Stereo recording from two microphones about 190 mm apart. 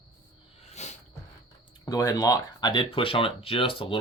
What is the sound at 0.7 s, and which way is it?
Cricket, 35° left (ahead or behind).